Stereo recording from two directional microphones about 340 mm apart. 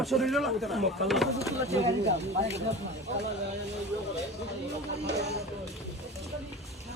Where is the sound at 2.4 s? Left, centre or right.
Centre.